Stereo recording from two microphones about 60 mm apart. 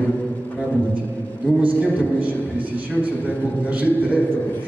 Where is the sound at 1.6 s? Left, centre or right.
Right.